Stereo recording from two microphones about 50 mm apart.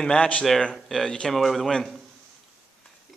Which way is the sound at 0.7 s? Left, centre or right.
Centre.